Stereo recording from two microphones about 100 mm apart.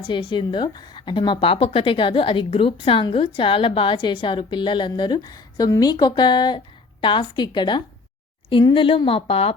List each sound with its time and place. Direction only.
0.1 s a woman's voice: 55° left (ahead or behind)
8.7 s speech: 60° left (ahead or behind)